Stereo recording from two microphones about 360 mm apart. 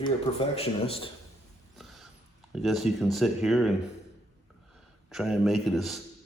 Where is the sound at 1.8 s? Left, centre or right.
Centre.